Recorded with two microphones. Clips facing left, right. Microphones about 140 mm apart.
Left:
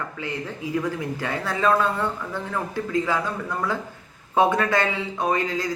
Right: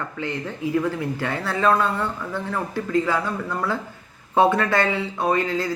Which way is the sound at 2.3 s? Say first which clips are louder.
Right 2 dB; 15° left (ahead or behind).